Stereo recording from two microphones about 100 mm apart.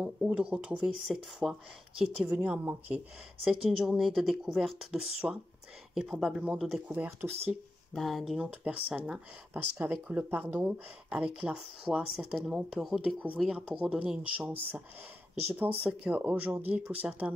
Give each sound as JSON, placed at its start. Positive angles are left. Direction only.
{"t": 0.0, "sound": "speech", "side_deg": -10}
{"t": 3.6, "sound": "speech", "side_deg": -5}
{"t": 5.2, "sound": "speech", "side_deg": -15}
{"t": 5.9, "sound": "speech", "side_deg": 0}
{"t": 6.9, "sound": "speech", "side_deg": -15}
{"t": 7.9, "sound": "speech", "side_deg": 0}
{"t": 8.5, "sound": "speech", "side_deg": -15}
{"t": 15.8, "sound": "speech", "side_deg": -15}